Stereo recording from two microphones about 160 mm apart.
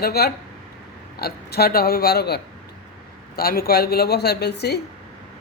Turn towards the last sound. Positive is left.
turn(degrees=90)